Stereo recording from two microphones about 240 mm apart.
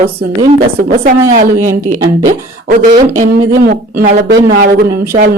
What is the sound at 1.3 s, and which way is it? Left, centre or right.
A woman's voice, right.